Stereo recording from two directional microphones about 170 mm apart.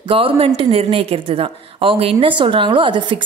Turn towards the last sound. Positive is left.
turn(degrees=-30)  # may be behind; listen again after turning